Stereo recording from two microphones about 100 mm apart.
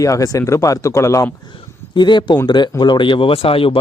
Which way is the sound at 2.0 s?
50° left (ahead or behind).